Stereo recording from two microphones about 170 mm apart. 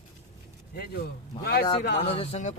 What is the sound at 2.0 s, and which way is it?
Speech, 35° left (ahead or behind).